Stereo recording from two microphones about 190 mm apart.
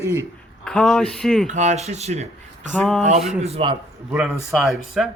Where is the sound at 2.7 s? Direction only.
5° left (ahead or behind).